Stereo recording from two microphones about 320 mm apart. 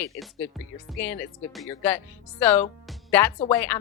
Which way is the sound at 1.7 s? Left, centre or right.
Centre.